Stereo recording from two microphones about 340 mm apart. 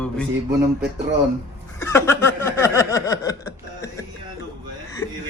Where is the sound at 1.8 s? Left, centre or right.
Centre.